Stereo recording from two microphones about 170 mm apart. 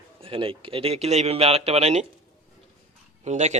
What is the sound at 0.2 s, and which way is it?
Speech, 30° right (ahead or behind).